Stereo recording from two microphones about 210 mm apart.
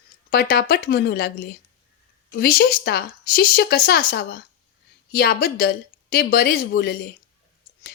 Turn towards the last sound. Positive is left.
turn(degrees=45)  # may be behind; listen again after turning